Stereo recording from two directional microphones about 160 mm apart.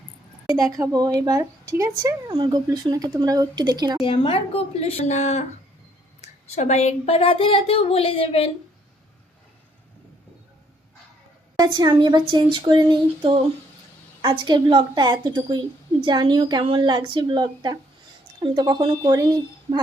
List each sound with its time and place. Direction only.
0.4 s a woman's voice: 20° right (ahead or behind)
4.0 s speech: 30° left (ahead or behind)
11.5 s a woman's voice: 25° right (ahead or behind)